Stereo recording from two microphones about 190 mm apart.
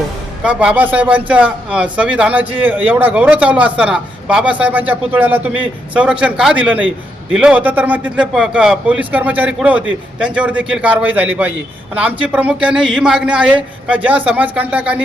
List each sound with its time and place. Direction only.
0.4 s a man's voice: 5° right (ahead or behind)